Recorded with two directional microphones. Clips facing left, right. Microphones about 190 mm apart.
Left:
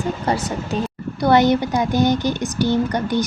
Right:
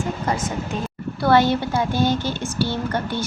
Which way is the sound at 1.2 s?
15° left (ahead or behind).